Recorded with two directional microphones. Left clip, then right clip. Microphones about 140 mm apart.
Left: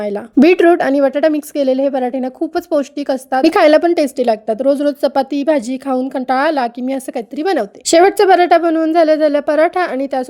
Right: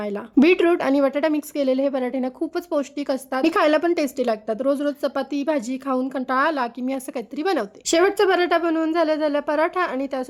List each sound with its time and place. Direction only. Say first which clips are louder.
0.0 s speech: left 7 dB; 25° left (ahead or behind)